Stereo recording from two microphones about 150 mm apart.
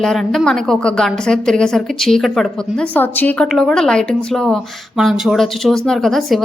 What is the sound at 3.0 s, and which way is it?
A woman's voice, 10° left (ahead or behind).